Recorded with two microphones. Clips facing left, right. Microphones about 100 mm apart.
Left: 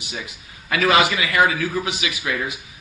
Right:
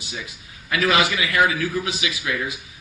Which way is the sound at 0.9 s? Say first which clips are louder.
Left 3 dB; 25° left (ahead or behind).